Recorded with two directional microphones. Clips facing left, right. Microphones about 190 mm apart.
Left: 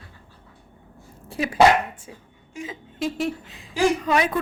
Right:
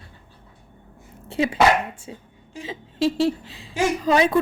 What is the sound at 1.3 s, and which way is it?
Dog, 25° right (ahead or behind).